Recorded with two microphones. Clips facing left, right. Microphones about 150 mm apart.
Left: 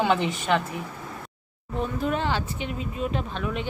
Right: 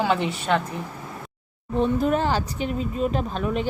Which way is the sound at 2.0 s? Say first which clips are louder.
Right 4 dB; 40° right (ahead or behind).